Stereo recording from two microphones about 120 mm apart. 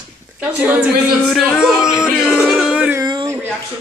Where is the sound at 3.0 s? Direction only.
35° right (ahead or behind).